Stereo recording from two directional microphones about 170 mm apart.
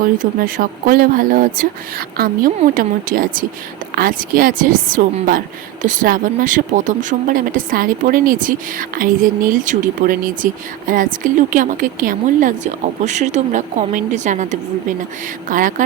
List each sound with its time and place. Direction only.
0.2 s speech: 55° right (ahead or behind)